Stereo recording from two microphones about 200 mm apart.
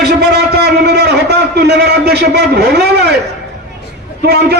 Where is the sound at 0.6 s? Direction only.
55° right (ahead or behind).